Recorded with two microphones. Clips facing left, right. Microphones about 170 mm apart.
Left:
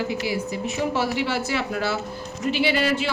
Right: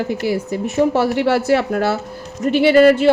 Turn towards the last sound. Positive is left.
turn(degrees=-55)  # may be behind; listen again after turning